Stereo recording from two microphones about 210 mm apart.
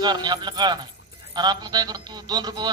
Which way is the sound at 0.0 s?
20° right (ahead or behind).